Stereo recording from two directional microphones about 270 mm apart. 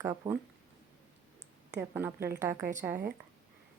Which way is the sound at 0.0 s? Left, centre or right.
Centre.